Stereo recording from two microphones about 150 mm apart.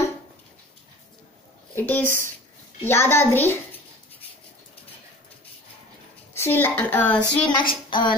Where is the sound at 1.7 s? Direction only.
15° left (ahead or behind).